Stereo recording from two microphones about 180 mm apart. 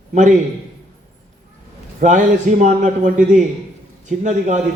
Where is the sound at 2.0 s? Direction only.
45° right (ahead or behind).